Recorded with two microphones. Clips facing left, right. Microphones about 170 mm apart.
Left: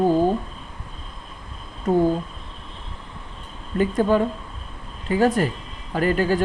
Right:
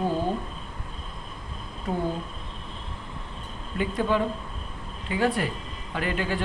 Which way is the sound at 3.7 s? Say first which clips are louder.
Left 6 dB; 40° left (ahead or behind).